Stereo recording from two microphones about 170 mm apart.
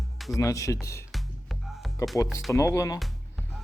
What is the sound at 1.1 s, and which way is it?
Music, centre (ahead or behind).